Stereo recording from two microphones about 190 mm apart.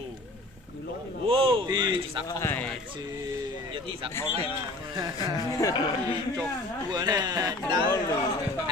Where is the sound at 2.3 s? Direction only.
15° left (ahead or behind).